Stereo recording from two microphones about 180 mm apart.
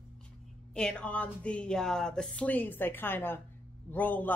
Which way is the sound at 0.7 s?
5° left (ahead or behind).